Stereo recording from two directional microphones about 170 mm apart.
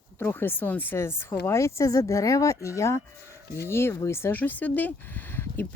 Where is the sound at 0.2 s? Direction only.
10° left (ahead or behind).